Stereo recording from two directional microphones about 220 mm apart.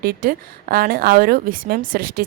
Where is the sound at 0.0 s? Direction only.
45° right (ahead or behind).